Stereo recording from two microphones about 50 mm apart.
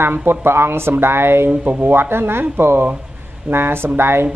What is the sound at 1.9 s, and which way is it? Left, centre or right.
A woman's voice, right.